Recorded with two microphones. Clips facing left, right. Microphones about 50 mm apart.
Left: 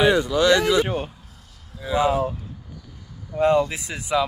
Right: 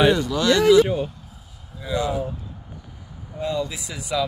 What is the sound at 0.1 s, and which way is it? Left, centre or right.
Speech, centre.